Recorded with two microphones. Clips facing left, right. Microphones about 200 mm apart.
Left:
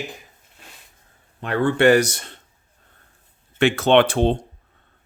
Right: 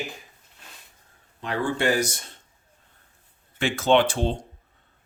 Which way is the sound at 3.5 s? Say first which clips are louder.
Left 5 dB; 65° left (ahead or behind).